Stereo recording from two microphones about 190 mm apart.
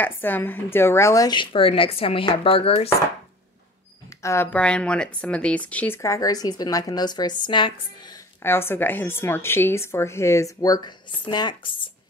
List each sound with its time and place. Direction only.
0.0 s speech: 10° left (ahead or behind); by 2.9 s 30° left (ahead or behind)
4.2 s speech: 15° left (ahead or behind)
8.4 s speech: 10° left (ahead or behind)